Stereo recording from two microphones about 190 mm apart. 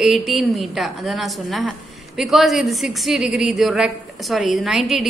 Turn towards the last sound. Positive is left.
turn(degrees=0)  # may be behind; listen again after turning